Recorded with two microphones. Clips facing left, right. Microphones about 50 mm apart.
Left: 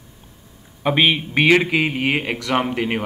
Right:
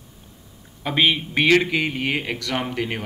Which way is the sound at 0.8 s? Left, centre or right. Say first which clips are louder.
Left 3 dB; centre.